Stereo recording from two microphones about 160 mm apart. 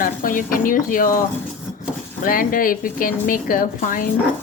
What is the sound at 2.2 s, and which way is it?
A woman's voice, 60° left (ahead or behind).